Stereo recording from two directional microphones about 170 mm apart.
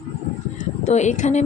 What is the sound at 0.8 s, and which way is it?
Speech, 45° left (ahead or behind).